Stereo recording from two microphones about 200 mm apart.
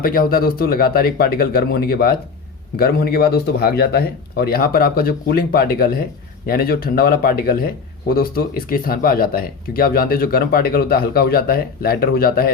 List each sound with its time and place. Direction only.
0.0 s speech: 45° left (ahead or behind)